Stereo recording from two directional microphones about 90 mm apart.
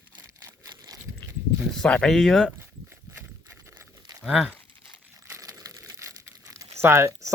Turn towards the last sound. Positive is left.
turn(degrees=-30)  # may be behind; listen again after turning